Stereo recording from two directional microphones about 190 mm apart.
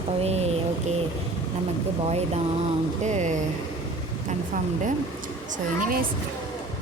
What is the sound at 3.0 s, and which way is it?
Speech, 40° right (ahead or behind).